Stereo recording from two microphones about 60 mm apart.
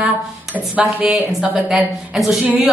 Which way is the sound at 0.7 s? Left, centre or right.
Right.